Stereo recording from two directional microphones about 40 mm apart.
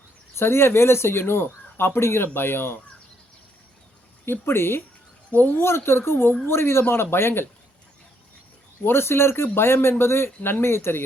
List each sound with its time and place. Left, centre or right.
0.3 s speech: left
4.3 s speech: left
5.3 s speech: left
5.6 s speech: left
6.4 s speech: left
8.8 s speech: left